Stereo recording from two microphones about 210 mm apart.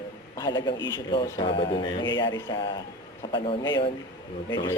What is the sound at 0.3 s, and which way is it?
A man's voice, 20° left (ahead or behind).